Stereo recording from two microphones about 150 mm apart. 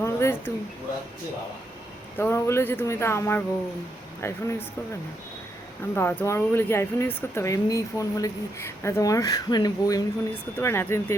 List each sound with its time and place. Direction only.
0.0 s a sound: 15° left (ahead or behind)
2.1 s speech: 15° left (ahead or behind)
5.9 s speech: 15° left (ahead or behind)